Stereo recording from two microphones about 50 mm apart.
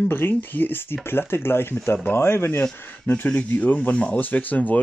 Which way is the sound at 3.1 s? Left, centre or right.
Left.